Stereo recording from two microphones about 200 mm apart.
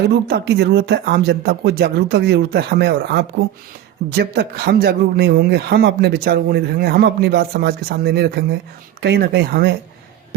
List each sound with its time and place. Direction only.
0.3 s speech: 55° right (ahead or behind)